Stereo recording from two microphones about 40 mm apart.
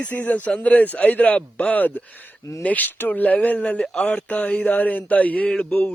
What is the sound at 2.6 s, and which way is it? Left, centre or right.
Mantra, left.